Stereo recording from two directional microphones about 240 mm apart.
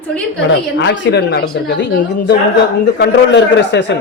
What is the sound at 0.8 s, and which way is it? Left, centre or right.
A woman's voice, left.